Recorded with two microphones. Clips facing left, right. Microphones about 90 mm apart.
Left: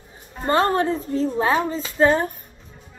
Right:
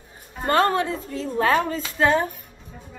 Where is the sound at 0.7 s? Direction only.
45° left (ahead or behind).